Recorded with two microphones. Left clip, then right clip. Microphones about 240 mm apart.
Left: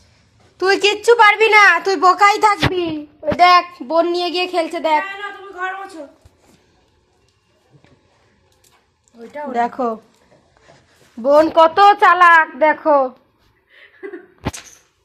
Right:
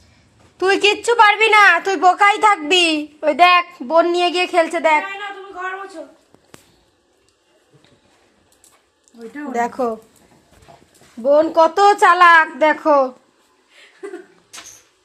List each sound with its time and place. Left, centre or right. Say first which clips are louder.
0.5 s a woman's voice: even; centre
9.1 s a woman's voice: left 2 dB; centre
11.2 s speech: left 2 dB; centre
11.5 s a woman's voice: left 2 dB; centre